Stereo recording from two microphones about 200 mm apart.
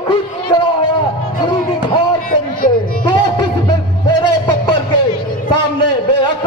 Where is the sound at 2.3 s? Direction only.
45° left (ahead or behind).